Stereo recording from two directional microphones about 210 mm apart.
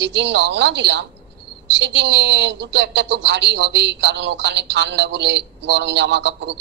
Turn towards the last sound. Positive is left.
turn(degrees=-55)  # may be behind; listen again after turning